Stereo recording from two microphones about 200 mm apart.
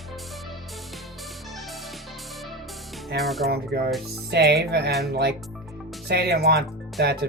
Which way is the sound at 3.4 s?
50° right (ahead or behind).